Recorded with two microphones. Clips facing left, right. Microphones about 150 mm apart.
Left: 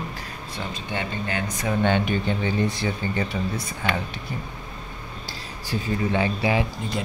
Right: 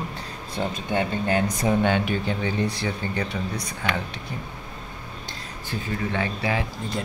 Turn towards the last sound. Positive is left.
turn(degrees=15)  # may be behind; listen again after turning